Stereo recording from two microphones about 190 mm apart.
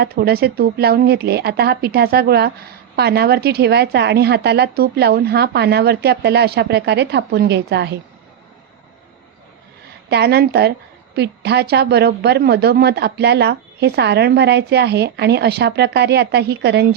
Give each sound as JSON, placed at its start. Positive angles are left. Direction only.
{"t": 0.0, "sound": "a woman's voice", "side_deg": -55}
{"t": 10.1, "sound": "a woman's voice", "side_deg": -60}